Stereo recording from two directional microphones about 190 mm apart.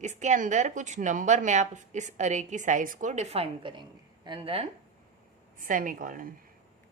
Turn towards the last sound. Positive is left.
turn(degrees=-45)  # may be behind; listen again after turning